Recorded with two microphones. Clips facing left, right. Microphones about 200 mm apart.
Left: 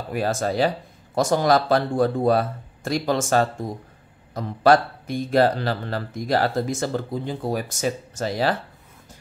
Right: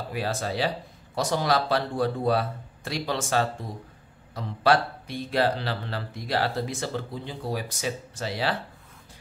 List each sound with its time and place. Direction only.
0.1 s speech: 45° left (ahead or behind)